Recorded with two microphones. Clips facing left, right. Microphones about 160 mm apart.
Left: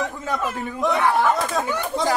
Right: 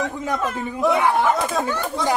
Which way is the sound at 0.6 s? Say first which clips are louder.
Right 3 dB; 5° right (ahead or behind).